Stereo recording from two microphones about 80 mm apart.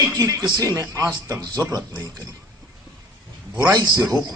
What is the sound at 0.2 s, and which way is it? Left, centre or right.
A man's voice, right.